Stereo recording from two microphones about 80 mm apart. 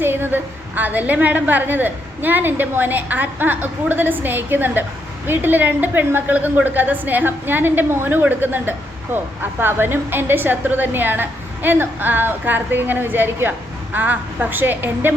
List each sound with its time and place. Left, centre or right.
0.0 s a woman's voice: right